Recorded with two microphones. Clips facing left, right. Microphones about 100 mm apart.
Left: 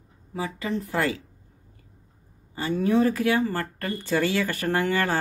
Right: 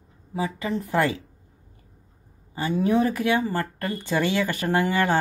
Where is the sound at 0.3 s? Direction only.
20° right (ahead or behind).